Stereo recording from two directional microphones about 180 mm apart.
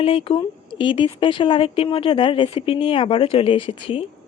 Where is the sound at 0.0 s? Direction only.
30° left (ahead or behind).